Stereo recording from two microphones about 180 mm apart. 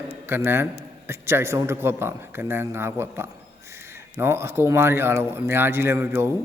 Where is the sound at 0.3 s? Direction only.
10° right (ahead or behind).